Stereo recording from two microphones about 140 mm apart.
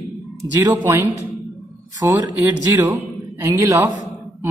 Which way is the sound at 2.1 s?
25° right (ahead or behind).